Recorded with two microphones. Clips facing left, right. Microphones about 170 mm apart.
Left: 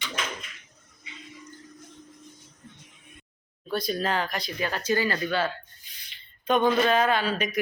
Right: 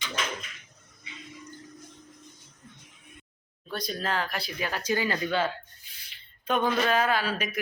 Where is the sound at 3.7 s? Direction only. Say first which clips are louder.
Left 4 dB; 5° left (ahead or behind); by 5.5 s 15° right (ahead or behind).